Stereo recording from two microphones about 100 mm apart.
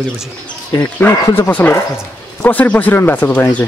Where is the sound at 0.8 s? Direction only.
20° left (ahead or behind).